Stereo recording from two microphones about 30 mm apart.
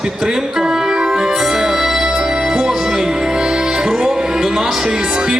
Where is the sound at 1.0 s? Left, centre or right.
Right.